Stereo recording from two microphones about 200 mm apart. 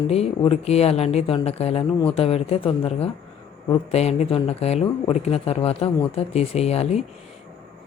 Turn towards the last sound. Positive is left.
turn(degrees=30)  # may be behind; listen again after turning